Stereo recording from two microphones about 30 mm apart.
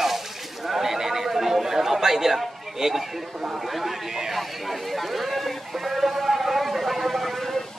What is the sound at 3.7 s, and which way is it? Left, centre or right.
Speech, centre.